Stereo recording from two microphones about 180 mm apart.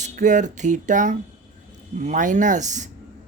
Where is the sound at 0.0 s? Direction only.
45° right (ahead or behind).